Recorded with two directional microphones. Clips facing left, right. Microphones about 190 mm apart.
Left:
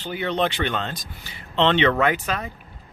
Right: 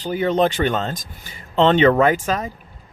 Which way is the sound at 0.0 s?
40° right (ahead or behind).